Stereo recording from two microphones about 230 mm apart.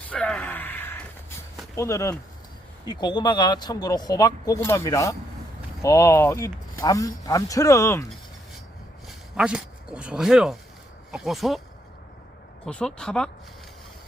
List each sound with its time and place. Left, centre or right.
0.1 s gasp: centre
1.7 s speech: centre
9.0 s speech: centre
12.6 s speech: centre